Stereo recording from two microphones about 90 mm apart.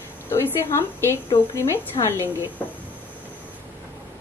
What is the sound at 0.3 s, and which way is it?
A woman's voice, 25° left (ahead or behind).